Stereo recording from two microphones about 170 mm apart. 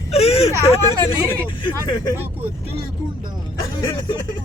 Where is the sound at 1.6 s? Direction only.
25° left (ahead or behind).